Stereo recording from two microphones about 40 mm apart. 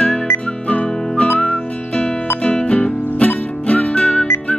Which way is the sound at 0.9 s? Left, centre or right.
Centre.